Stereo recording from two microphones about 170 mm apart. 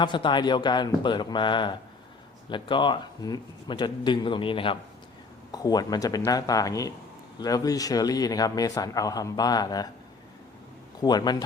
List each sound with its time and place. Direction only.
0.0 s speech: 25° left (ahead or behind)
11.0 s speech: 25° left (ahead or behind)